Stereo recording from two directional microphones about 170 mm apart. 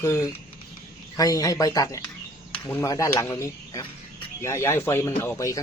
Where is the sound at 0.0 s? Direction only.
20° left (ahead or behind).